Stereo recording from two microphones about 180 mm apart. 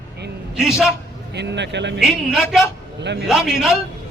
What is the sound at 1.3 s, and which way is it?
Speech, 75° right (ahead or behind).